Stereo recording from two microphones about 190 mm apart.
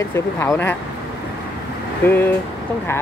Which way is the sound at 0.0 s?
15° left (ahead or behind).